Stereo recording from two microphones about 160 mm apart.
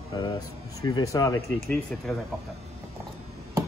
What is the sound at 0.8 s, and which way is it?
Speech, 25° left (ahead or behind).